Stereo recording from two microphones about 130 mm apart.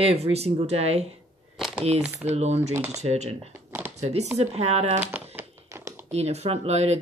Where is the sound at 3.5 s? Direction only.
15° right (ahead or behind).